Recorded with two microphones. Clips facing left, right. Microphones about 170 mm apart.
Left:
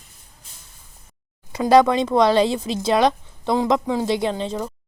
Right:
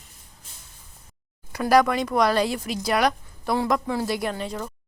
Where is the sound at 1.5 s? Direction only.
25° left (ahead or behind).